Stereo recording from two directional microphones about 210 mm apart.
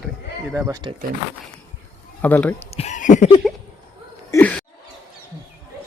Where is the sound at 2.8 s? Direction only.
35° left (ahead or behind).